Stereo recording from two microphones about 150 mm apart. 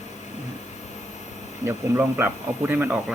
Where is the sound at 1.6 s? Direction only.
15° right (ahead or behind).